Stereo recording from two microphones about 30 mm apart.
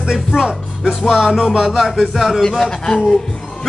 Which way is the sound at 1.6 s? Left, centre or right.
Centre.